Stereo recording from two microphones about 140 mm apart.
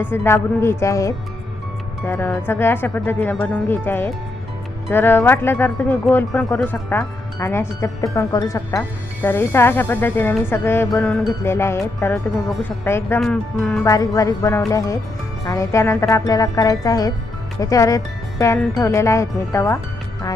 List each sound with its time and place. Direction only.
0.0 s speech: 15° left (ahead or behind)
13.1 s speech: centre (ahead or behind)
13.8 s speech: 25° left (ahead or behind)